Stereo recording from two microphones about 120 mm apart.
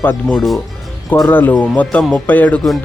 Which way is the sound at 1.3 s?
15° left (ahead or behind).